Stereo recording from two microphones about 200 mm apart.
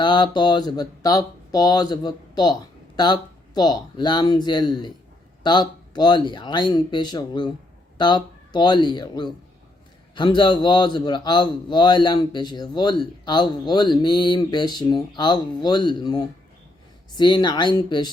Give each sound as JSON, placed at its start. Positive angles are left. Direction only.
{"t": 0.0, "sound": "a man's voice", "side_deg": 20}